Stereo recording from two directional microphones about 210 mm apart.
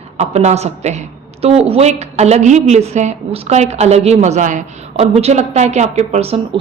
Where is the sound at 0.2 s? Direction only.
30° right (ahead or behind).